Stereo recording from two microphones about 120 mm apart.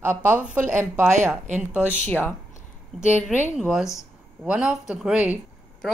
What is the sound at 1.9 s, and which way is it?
Speech, 15° left (ahead or behind).